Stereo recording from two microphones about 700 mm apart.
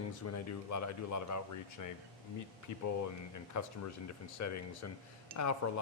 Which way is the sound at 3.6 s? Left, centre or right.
Left.